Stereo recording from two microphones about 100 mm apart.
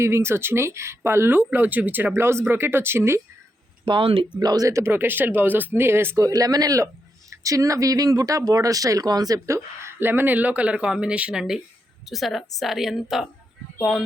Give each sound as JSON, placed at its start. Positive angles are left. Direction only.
{"t": 0.0, "sound": "speech", "side_deg": -25}
{"t": 3.8, "sound": "speech", "side_deg": -60}
{"t": 4.4, "sound": "speech", "side_deg": -40}
{"t": 6.2, "sound": "a woman's voice", "side_deg": -40}